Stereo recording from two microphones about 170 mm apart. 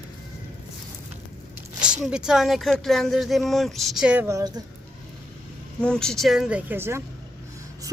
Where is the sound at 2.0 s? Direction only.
5° right (ahead or behind); by 4.6 s 20° right (ahead or behind).